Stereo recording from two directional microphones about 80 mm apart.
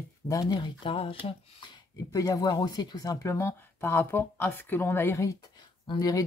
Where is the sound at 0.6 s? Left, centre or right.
Left.